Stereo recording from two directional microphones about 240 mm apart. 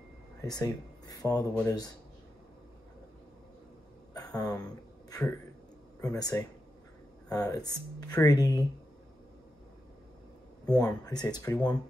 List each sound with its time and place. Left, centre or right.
0.4 s speech: centre
4.4 s speech: centre
5.9 s speech: centre
10.6 s speech: centre